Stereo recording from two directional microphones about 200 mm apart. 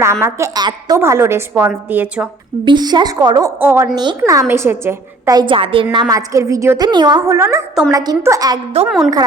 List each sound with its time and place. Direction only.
0.0 s a woman's voice: 15° right (ahead or behind)
2.6 s a woman's voice: 20° right (ahead or behind)
8.7 s a woman's voice: 30° right (ahead or behind)